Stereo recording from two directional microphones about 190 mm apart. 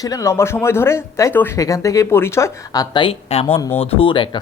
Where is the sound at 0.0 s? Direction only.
15° left (ahead or behind).